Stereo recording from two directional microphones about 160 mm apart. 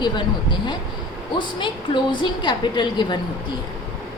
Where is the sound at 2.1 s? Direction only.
30° left (ahead or behind).